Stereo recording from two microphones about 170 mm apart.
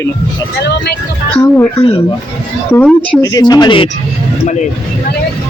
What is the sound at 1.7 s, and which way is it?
Speech, 35° left (ahead or behind).